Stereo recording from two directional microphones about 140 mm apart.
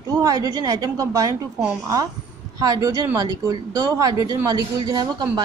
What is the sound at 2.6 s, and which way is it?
A woman's voice, 25° right (ahead or behind).